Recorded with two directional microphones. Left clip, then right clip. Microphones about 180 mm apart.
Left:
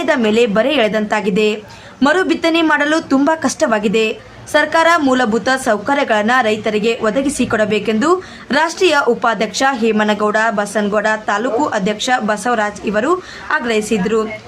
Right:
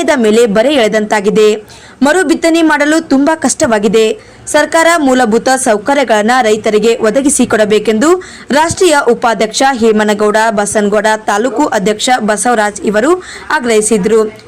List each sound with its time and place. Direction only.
0.0 s a woman's voice: 30° right (ahead or behind)